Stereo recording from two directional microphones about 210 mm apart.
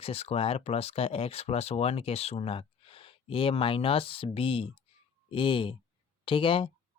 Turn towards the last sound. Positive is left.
turn(degrees=25)  # may be behind; listen again after turning